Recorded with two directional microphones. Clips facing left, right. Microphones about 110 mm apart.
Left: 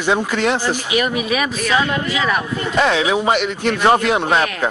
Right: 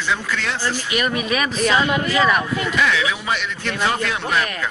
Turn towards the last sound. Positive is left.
turn(degrees=25)  # may be behind; listen again after turning